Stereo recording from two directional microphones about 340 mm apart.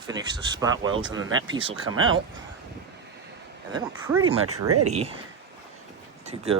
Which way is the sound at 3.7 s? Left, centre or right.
Centre.